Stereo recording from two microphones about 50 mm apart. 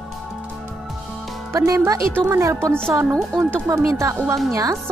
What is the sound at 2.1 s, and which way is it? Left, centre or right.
Speech, right.